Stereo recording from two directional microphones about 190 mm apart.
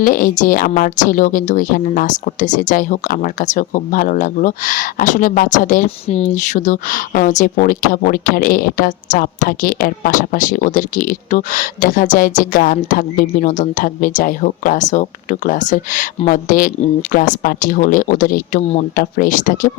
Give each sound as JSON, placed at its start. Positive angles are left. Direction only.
{"t": 0.0, "sound": "speech", "side_deg": 45}